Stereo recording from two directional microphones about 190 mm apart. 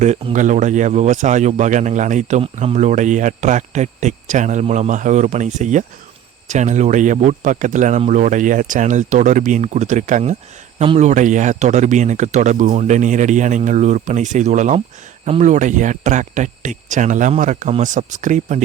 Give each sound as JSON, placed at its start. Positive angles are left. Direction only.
{"t": 0.3, "sound": "speech", "side_deg": -40}